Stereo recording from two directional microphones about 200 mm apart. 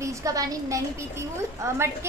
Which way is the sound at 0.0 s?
15° right (ahead or behind).